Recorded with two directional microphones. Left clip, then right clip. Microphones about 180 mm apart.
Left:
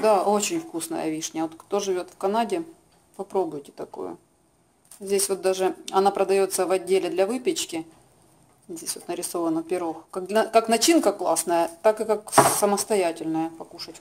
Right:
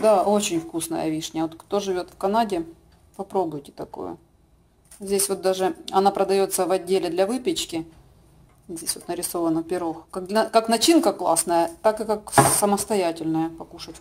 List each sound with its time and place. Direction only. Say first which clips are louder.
0.0 s speech: right 2 dB; centre (ahead or behind)
8.8 s speech: right 2 dB; centre (ahead or behind)